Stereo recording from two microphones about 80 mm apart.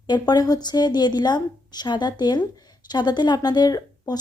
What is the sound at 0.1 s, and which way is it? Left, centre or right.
A woman's voice, left.